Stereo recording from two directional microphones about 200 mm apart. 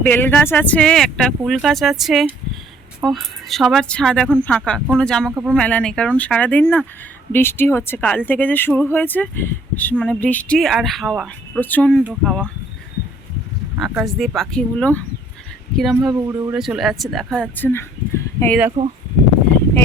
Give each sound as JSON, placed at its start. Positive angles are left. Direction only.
{"t": 0.0, "sound": "speech", "side_deg": 10}
{"t": 11.6, "sound": "speech", "side_deg": 10}
{"t": 13.7, "sound": "speech", "side_deg": 0}
{"t": 16.1, "sound": "speech", "side_deg": -15}
{"t": 18.8, "sound": "speech", "side_deg": -30}